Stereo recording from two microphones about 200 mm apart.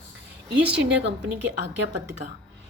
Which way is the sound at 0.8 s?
60° right (ahead or behind).